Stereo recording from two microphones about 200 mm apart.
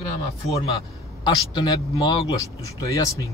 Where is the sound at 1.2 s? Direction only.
20° left (ahead or behind).